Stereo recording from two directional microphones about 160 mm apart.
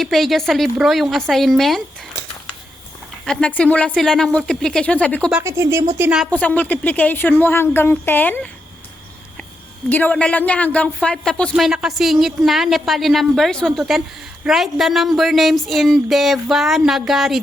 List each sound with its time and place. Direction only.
0.0 s speech: centre (ahead or behind)
3.2 s speech: 5° left (ahead or behind)
5.4 s speech: 15° right (ahead or behind)
6.3 s speech: 10° left (ahead or behind)
9.9 s speech: 10° left (ahead or behind)